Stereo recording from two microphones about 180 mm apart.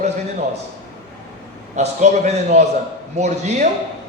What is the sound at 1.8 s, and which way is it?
A man's voice, 40° right (ahead or behind).